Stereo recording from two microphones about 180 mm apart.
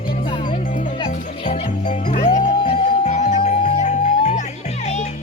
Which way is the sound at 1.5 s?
40° left (ahead or behind).